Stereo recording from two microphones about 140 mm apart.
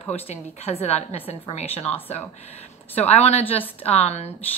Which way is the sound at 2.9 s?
50° left (ahead or behind).